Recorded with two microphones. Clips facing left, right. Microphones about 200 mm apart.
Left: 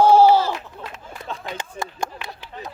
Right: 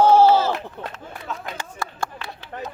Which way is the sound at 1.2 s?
30° left (ahead or behind).